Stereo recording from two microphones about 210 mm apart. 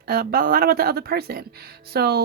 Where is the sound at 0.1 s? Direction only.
45° right (ahead or behind).